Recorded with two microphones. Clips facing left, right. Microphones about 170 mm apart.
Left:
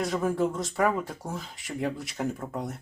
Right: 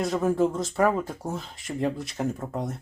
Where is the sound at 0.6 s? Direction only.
Centre (ahead or behind).